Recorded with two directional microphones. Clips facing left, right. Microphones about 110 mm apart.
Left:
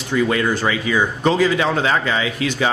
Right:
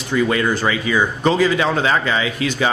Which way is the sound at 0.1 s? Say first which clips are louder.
Even; 15° right (ahead or behind).